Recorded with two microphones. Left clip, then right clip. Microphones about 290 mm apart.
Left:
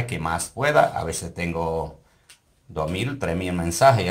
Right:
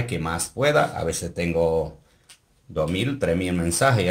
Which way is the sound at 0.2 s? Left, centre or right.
Centre.